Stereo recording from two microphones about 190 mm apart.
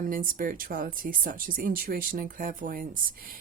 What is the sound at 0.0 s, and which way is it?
Speech, 45° right (ahead or behind).